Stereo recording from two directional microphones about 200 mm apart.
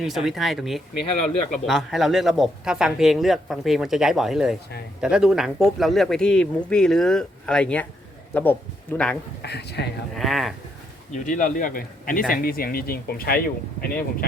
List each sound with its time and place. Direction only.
0.0 s a man's voice: centre (ahead or behind)
9.4 s speech: 55° left (ahead or behind)
10.2 s speech: centre (ahead or behind)
11.3 s speech: 40° left (ahead or behind)